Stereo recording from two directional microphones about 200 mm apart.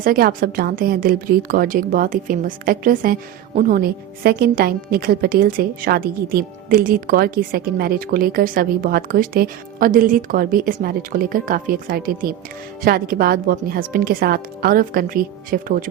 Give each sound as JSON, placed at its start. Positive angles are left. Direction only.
{"t": 0.0, "sound": "a woman's voice", "side_deg": -45}